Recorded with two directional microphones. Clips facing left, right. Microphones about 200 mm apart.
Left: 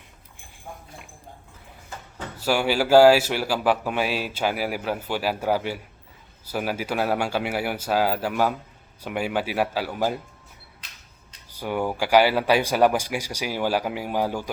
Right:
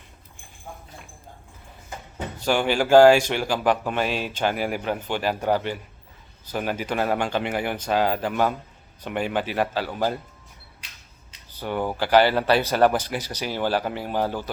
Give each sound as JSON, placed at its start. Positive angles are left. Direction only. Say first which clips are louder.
{"t": 1.9, "sound": "a sound", "louder": "right 3 dB", "side_deg": -20}
{"t": 2.4, "sound": "speech", "louder": "even", "side_deg": 5}
{"t": 11.5, "sound": "speech", "louder": "left 1 dB", "side_deg": 10}